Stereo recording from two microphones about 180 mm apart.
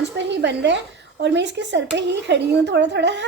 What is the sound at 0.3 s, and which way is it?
Speech, 75° right (ahead or behind).